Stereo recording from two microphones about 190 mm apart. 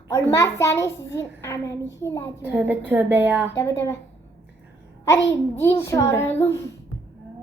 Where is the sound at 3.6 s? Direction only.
15° left (ahead or behind).